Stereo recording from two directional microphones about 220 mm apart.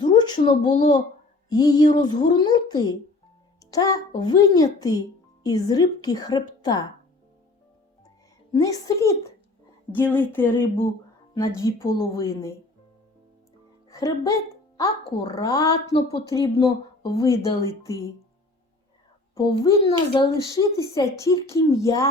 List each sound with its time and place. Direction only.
0.0 s a sound: 20° left (ahead or behind)
0.6 s a child's voice: 20° left (ahead or behind)
8.5 s a child's voice: 15° left (ahead or behind)
13.9 s a child's voice: 15° left (ahead or behind)
19.3 s a child's voice: 15° left (ahead or behind)